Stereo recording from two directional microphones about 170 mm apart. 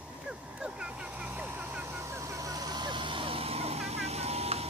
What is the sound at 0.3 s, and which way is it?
Vehicle, 5° right (ahead or behind).